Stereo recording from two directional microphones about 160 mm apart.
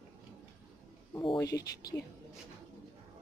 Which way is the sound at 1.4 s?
20° left (ahead or behind).